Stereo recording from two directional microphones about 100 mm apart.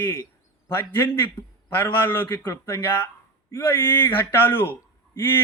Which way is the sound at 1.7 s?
20° left (ahead or behind).